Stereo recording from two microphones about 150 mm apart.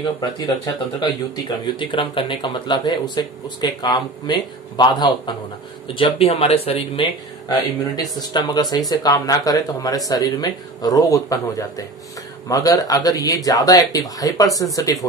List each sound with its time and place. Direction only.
0.0 s speech: 30° left (ahead or behind)
7.4 s speech: 25° left (ahead or behind)